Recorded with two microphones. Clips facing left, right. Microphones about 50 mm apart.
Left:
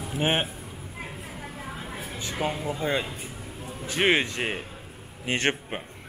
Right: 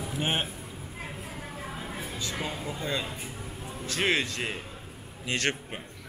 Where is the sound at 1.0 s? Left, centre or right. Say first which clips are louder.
Left 1 dB; centre.